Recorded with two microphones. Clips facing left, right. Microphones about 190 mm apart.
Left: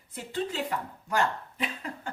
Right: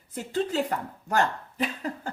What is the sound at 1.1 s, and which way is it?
Speech, 40° right (ahead or behind).